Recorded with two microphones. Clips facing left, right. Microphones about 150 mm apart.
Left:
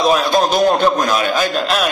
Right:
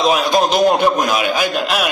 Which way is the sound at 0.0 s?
15° right (ahead or behind).